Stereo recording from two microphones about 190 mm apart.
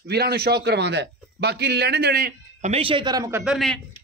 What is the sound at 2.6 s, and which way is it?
Speech, 30° right (ahead or behind).